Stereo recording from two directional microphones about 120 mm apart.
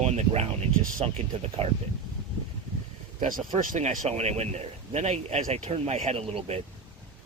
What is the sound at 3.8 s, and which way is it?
Speech, 65° right (ahead or behind).